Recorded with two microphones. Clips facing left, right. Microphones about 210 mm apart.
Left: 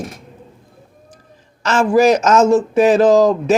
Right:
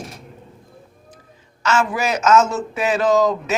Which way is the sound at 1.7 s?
35° left (ahead or behind).